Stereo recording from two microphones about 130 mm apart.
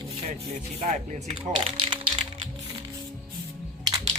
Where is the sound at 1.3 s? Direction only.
40° right (ahead or behind).